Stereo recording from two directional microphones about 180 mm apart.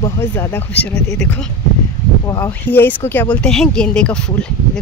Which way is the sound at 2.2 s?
15° left (ahead or behind).